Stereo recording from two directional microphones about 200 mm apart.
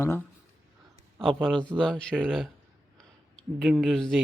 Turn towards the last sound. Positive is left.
turn(degrees=0)  # may be behind; listen again after turning